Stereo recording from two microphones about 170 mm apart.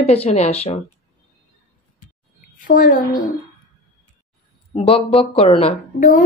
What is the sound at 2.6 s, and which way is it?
Speech, 50° left (ahead or behind).